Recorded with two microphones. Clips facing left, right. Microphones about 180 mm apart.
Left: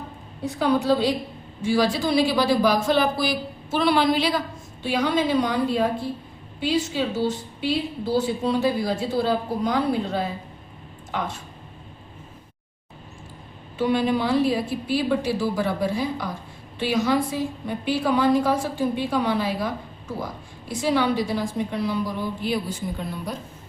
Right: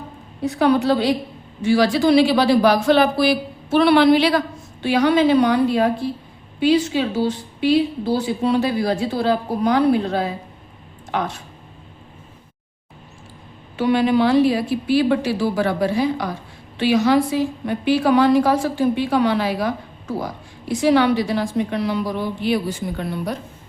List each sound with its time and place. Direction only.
0.4 s a woman's voice: 75° right (ahead or behind)
6.6 s a woman's voice: 85° right
8.6 s a woman's voice: 70° right (ahead or behind)
11.1 s a woman's voice: 85° right
13.7 s a woman's voice: 80° right